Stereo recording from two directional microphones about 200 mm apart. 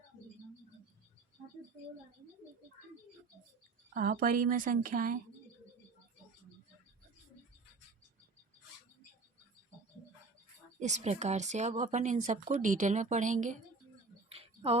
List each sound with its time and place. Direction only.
3.9 s a woman's voice: 40° right (ahead or behind)
10.8 s speech: 35° right (ahead or behind)
14.3 s a sound: 30° right (ahead or behind)